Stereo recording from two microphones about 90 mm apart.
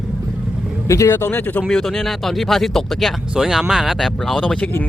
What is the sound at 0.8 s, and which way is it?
Speech, 35° left (ahead or behind).